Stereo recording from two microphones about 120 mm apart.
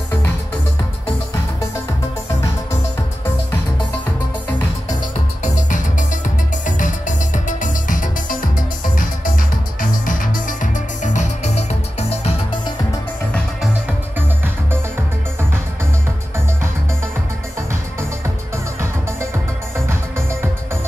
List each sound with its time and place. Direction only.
5.4 s music: 90° left
10.0 s music: 90° left; by 12.4 s 60° left (ahead or behind)
19.9 s music: 20° right (ahead or behind)